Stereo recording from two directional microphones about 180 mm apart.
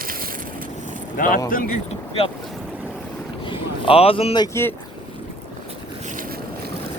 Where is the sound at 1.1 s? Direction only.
50° left (ahead or behind).